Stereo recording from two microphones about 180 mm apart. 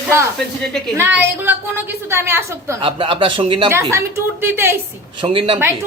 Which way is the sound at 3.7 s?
15° right (ahead or behind).